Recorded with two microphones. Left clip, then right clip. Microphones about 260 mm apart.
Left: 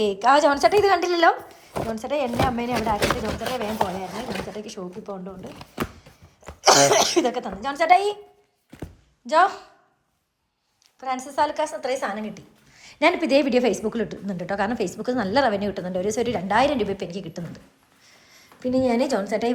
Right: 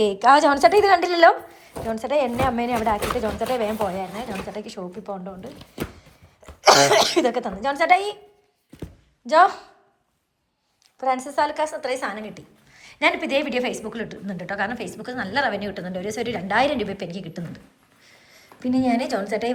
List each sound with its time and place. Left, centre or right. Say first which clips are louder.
0.0 s a woman's voice: right 2 dB; centre
8.8 s a sound: right 1 dB; centre
11.0 s a woman's voice: right 2 dB; centre